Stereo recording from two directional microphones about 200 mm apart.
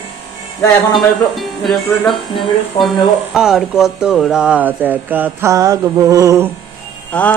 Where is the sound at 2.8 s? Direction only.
25° left (ahead or behind).